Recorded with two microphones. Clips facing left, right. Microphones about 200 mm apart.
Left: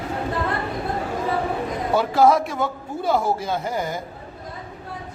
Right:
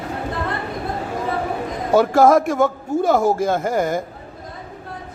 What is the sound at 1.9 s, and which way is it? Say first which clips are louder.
A man's voice: right 4 dB; 45° right (ahead or behind).